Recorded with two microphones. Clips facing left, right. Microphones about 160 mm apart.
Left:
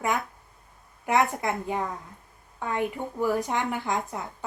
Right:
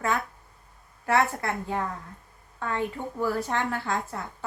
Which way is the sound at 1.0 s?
15° left (ahead or behind).